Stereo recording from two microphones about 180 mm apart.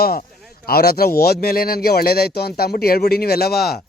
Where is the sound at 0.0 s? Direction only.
60° left (ahead or behind).